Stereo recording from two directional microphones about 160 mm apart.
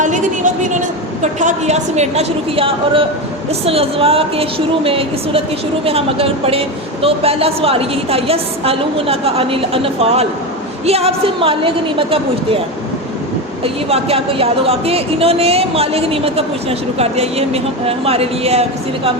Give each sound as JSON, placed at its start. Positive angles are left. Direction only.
{"t": 0.0, "sound": "a sound", "side_deg": -50}
{"t": 1.2, "sound": "a woman's voice", "side_deg": -50}
{"t": 13.9, "sound": "speech", "side_deg": -40}